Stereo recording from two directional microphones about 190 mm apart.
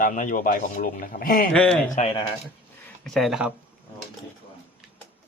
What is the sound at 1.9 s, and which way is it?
Speech, 30° left (ahead or behind).